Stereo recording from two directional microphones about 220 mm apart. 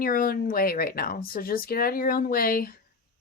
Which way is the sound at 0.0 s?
40° left (ahead or behind).